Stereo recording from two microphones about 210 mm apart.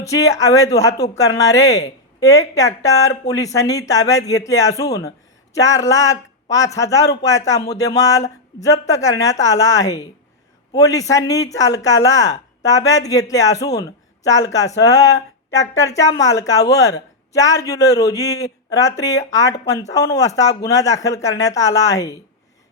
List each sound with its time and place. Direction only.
0.0 s a man's voice: 15° left (ahead or behind)